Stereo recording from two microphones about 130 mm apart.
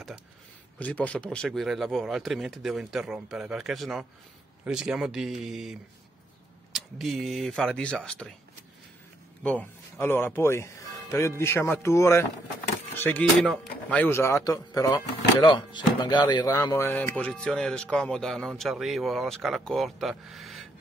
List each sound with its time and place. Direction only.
0.7 s speech: 10° left (ahead or behind)
9.4 s speech: 10° left (ahead or behind)
15.4 s speech: 35° left (ahead or behind); by 20.6 s centre (ahead or behind)